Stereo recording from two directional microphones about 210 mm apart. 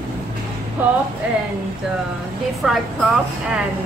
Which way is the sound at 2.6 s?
5° right (ahead or behind).